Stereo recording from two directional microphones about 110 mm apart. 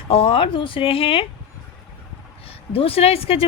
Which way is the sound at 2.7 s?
60° left (ahead or behind).